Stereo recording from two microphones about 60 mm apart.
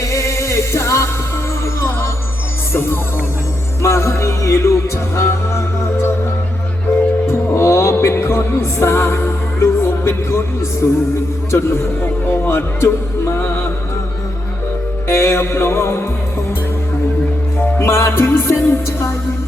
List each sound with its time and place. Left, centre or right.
0.0 s music: left
2.7 s music: left
7.3 s music: left
12.4 s music: left
15.0 s music: left
17.6 s music: left